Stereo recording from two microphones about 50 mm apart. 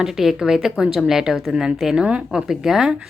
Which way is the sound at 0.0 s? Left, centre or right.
Centre.